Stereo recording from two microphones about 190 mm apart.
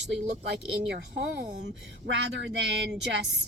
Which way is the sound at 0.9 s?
65° right (ahead or behind).